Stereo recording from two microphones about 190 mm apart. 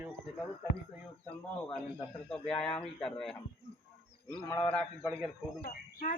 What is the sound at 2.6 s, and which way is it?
Speech, 5° left (ahead or behind).